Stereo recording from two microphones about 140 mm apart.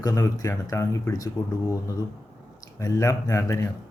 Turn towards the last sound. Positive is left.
turn(degrees=20)  # may be behind; listen again after turning